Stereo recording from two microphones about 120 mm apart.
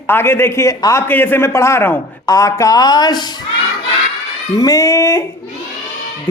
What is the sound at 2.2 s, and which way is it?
Speech, 30° left (ahead or behind).